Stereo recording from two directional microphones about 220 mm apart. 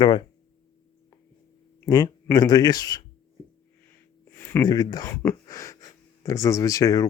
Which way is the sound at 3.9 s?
10° left (ahead or behind).